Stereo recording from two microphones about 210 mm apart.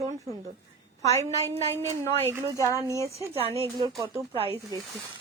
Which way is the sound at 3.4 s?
25° right (ahead or behind).